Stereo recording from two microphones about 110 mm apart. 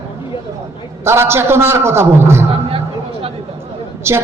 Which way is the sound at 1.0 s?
25° right (ahead or behind).